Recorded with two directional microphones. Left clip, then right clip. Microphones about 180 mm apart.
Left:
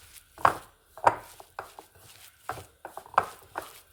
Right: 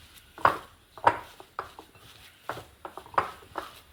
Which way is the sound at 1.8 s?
20° left (ahead or behind).